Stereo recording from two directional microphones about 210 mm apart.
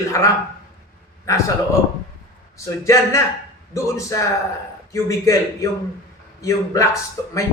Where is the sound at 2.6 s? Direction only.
15° left (ahead or behind).